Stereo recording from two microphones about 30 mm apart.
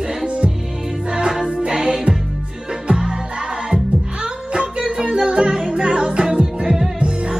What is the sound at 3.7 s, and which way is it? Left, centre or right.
Music, right.